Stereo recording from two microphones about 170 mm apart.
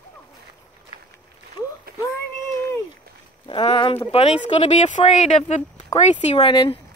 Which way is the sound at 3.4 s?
30° left (ahead or behind).